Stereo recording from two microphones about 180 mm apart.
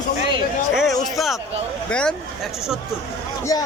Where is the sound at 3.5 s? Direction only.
20° left (ahead or behind).